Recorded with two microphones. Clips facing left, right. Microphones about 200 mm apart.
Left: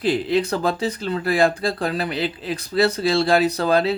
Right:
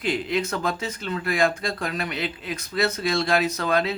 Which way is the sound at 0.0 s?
30° left (ahead or behind).